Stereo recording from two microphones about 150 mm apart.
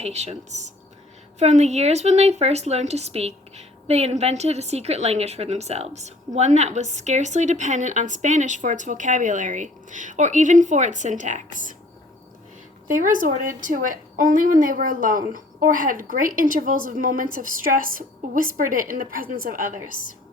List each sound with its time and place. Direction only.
0.0 s speech: 45° right (ahead or behind)
12.9 s a woman's voice: 60° right (ahead or behind)
19.9 s a woman's voice: 60° left (ahead or behind)